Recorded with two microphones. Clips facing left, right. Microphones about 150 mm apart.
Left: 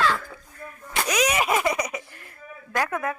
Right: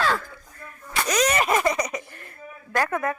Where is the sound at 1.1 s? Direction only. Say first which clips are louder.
Right 1 dB; 5° left (ahead or behind).